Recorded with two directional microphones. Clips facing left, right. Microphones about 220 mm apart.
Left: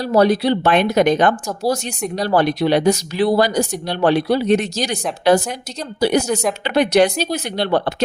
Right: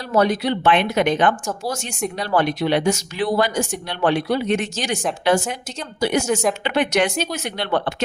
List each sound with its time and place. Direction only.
0.1 s speech: 35° left (ahead or behind)